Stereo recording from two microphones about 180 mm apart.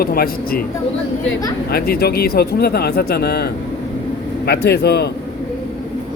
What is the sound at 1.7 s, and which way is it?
Speech, 60° left (ahead or behind).